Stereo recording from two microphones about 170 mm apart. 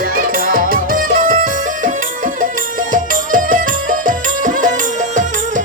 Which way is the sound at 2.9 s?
50° right (ahead or behind).